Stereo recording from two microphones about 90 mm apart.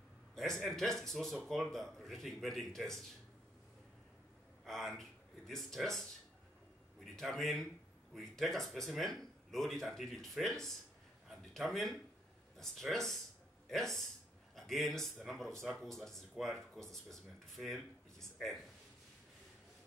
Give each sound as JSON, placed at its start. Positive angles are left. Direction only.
{"t": 0.4, "sound": "speech", "side_deg": 5}
{"t": 4.6, "sound": "a man's voice", "side_deg": 5}